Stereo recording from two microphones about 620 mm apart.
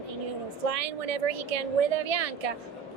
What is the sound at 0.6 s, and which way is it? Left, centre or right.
A woman's voice, right.